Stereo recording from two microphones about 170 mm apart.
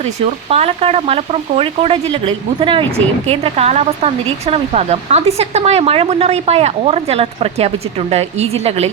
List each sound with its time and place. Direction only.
0.5 s speech: 35° right (ahead or behind)